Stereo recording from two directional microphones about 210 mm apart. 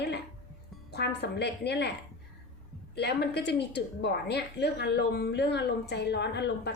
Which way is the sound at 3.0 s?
50° left (ahead or behind).